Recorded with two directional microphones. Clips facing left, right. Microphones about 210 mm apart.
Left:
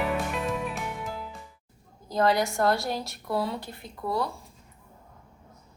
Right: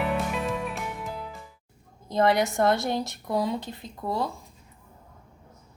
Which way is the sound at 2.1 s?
20° right (ahead or behind).